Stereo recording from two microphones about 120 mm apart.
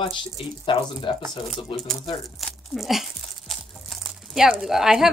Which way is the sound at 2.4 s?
Centre (ahead or behind).